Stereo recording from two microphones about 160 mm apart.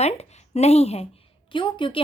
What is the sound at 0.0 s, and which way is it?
A woman's voice, 45° left (ahead or behind).